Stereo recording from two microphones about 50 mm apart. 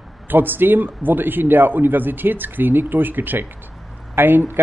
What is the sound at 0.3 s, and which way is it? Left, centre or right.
Speech, right.